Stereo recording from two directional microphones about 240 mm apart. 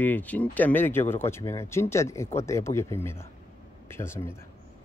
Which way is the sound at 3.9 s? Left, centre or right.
Centre.